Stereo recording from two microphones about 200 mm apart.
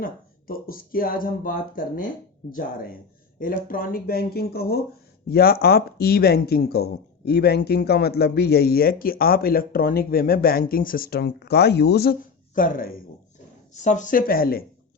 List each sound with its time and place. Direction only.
0.0 s speech: 45° left (ahead or behind)
3.3 s speech: 45° left (ahead or behind)